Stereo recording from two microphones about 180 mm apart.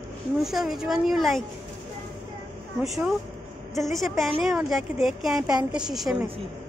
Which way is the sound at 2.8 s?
5° right (ahead or behind).